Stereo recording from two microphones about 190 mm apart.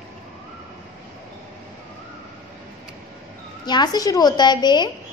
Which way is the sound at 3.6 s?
20° left (ahead or behind).